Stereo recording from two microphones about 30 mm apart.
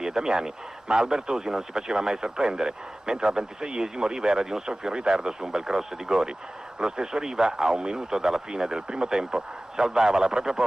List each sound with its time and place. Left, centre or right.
0.0 s a man's voice: right